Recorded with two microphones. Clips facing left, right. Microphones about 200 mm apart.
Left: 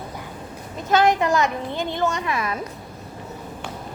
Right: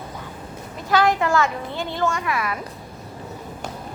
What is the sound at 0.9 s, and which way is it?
A man's voice, 20° left (ahead or behind).